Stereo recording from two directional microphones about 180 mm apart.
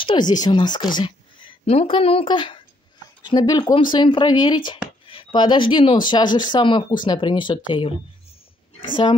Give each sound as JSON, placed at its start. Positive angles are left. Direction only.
{"t": 0.0, "sound": "speech", "side_deg": 25}